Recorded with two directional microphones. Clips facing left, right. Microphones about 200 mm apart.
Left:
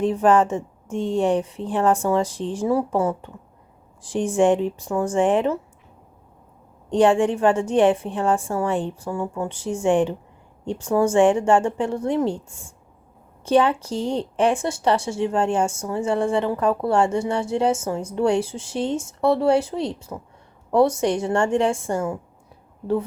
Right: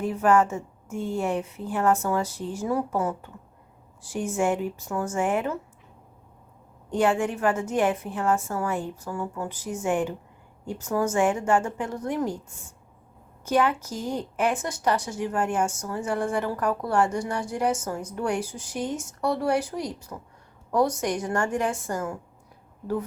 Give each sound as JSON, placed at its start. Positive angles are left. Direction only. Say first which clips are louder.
{"t": 0.1, "sound": "speech", "louder": "left 4 dB", "side_deg": 30}
{"t": 6.9, "sound": "a woman's voice", "louder": "left 6 dB", "side_deg": 30}
{"t": 13.4, "sound": "a woman's voice", "louder": "left 5 dB", "side_deg": 30}